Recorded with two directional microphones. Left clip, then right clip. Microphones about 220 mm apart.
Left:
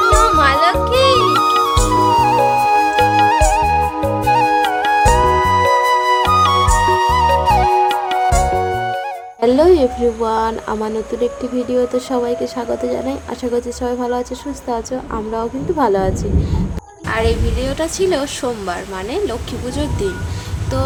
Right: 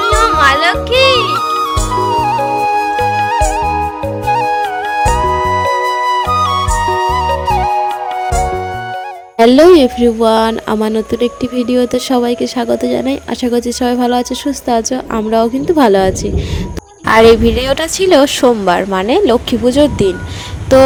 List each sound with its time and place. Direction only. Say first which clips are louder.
0.0 s music: right 2 dB; centre (ahead or behind)
9.5 s speech: right 5 dB; 35° right (ahead or behind)